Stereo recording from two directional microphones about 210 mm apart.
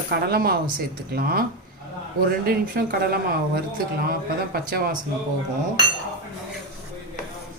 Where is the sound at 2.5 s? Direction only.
45° right (ahead or behind).